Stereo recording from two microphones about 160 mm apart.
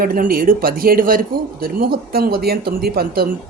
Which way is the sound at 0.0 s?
65° right (ahead or behind).